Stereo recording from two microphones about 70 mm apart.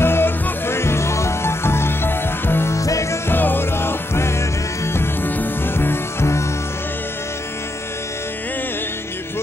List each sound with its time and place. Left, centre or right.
0.0 s music: left
2.7 s music: left
3.3 s music: left